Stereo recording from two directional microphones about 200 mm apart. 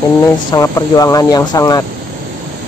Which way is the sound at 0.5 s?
15° left (ahead or behind).